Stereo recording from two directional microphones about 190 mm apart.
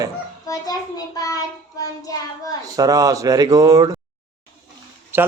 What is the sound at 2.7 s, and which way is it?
Speech, 20° right (ahead or behind).